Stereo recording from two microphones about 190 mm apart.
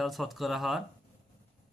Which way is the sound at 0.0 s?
Centre (ahead or behind).